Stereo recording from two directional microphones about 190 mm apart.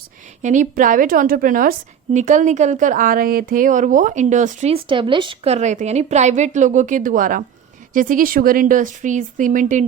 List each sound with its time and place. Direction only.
0.4 s a woman's voice: 40° right (ahead or behind)